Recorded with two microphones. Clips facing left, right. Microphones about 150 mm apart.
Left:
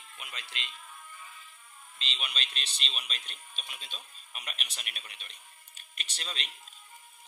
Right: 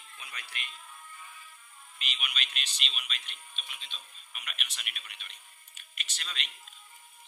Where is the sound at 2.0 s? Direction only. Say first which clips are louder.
Left 1 dB; 30° left (ahead or behind).